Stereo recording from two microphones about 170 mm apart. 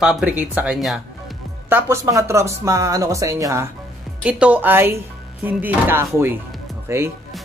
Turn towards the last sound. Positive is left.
turn(degrees=-15)  # may be behind; listen again after turning